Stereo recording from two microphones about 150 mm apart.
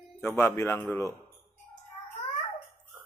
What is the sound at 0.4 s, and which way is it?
Speech, 15° left (ahead or behind).